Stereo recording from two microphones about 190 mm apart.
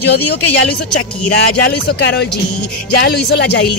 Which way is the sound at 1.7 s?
60° left (ahead or behind).